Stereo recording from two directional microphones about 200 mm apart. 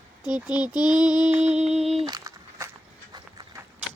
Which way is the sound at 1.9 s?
30° right (ahead or behind).